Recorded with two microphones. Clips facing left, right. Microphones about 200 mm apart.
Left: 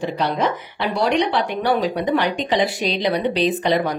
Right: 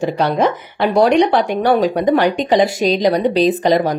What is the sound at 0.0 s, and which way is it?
A woman's voice, 50° right (ahead or behind).